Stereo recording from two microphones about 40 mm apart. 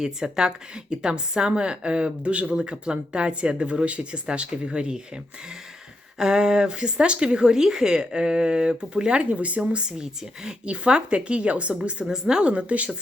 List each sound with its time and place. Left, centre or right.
0.0 s speech: centre
6.1 s speech: centre; by 9.6 s right
9.7 s speech: right
12.0 s a woman's voice: centre
12.5 s speech: right